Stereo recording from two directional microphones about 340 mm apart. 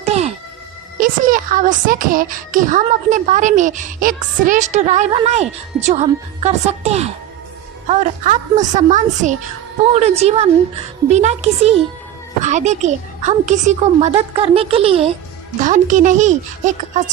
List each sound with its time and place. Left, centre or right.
0.0 s music: centre
0.9 s speech: right